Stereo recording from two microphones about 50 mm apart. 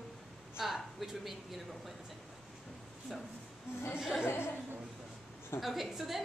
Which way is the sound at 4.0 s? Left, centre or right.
Centre.